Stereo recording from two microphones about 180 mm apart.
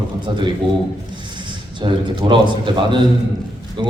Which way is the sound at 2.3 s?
25° right (ahead or behind).